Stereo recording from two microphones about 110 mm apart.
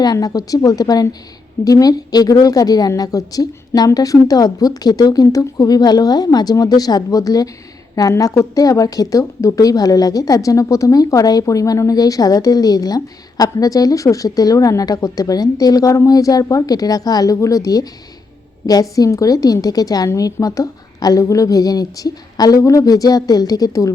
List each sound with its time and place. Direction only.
0.0 s a woman's voice: 35° left (ahead or behind)